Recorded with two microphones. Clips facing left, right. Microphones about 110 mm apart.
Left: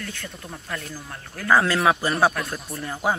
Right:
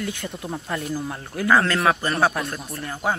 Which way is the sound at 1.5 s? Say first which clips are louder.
Even; 5° left (ahead or behind).